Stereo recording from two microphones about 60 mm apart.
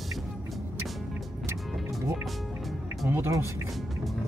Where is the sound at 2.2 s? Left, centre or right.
Centre.